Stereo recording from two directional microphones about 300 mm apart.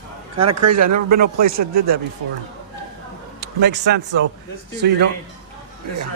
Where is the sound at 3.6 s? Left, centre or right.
Right.